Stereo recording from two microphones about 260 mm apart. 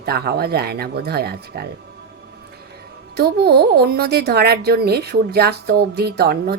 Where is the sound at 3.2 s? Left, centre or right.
Right.